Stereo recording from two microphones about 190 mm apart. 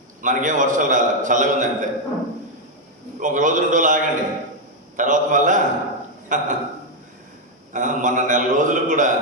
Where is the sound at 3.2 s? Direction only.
40° right (ahead or behind).